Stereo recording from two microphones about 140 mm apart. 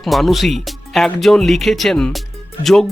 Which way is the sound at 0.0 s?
Centre (ahead or behind).